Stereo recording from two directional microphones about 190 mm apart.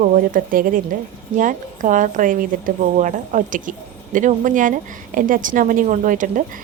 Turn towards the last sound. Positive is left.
turn(degrees=-45)  # may be behind; listen again after turning